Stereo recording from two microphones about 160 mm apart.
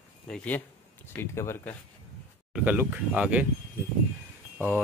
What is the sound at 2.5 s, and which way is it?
Speech, 10° right (ahead or behind).